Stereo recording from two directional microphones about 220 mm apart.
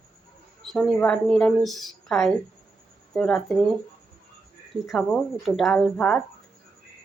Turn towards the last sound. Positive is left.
turn(degrees=5)  # may be behind; listen again after turning